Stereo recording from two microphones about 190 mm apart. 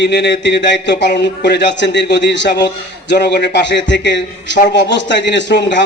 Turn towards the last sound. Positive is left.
turn(degrees=70)  # may be behind; listen again after turning